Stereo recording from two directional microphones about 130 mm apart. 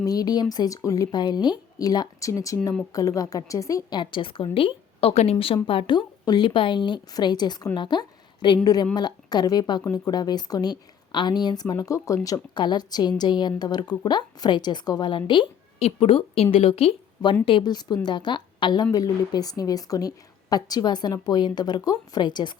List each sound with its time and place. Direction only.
0.0 s a woman's voice: 30° left (ahead or behind); by 17.3 s 50° left (ahead or behind)
17.4 s speech: 35° left (ahead or behind)